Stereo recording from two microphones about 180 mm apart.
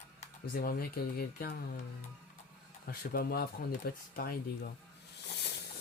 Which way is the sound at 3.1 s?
55° left (ahead or behind).